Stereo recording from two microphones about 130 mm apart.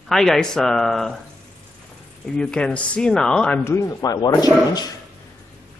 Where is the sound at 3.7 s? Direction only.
30° left (ahead or behind).